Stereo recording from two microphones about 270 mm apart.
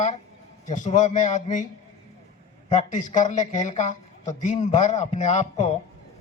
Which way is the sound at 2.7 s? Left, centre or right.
Left.